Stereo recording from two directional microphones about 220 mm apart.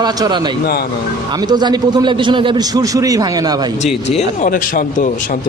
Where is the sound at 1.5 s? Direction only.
20° right (ahead or behind).